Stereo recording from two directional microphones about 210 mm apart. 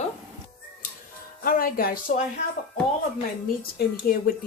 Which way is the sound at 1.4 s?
45° left (ahead or behind).